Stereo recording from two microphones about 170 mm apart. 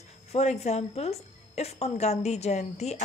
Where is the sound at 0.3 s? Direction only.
40° left (ahead or behind).